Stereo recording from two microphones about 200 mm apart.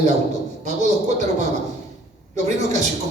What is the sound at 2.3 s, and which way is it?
Speech, 35° right (ahead or behind).